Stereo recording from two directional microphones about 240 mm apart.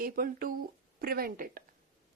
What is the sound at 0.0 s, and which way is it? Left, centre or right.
Speech, right.